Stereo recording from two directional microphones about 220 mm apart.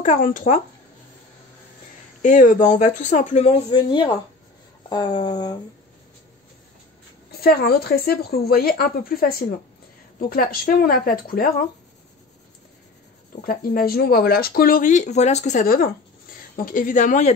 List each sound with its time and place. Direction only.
0.0 s speech: 35° left (ahead or behind)
2.2 s speech: 35° left (ahead or behind); by 4.1 s 20° left (ahead or behind)
4.8 s a sound: 20° left (ahead or behind)
7.2 s speech: 45° left (ahead or behind)
13.3 s speech: 40° left (ahead or behind)